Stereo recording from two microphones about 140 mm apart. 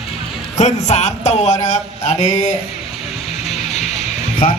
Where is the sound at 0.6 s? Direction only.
55° left (ahead or behind).